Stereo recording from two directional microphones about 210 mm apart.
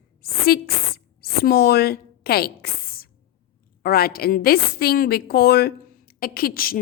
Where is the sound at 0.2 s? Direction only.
45° left (ahead or behind).